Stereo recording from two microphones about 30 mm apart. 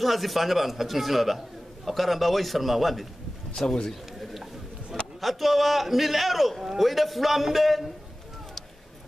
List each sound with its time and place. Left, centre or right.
0.0 s speech: centre
3.5 s speech: left
5.2 s speech: centre